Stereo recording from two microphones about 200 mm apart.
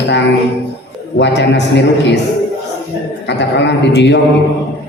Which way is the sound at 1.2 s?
60° left (ahead or behind).